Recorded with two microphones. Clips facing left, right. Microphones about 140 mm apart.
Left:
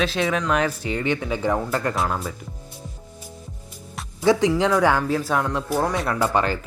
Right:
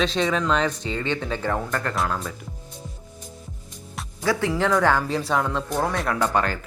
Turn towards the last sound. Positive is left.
turn(degrees=5)  # may be behind; listen again after turning